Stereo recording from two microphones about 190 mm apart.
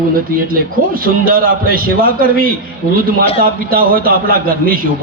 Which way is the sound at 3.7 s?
50° right (ahead or behind).